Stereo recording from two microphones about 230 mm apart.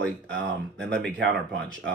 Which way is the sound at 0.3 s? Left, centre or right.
Right.